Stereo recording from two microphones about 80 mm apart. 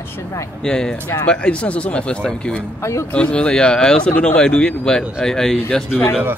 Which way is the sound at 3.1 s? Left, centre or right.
Centre.